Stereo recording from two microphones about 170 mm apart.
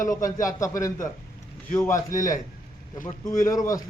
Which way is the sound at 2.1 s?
50° left (ahead or behind).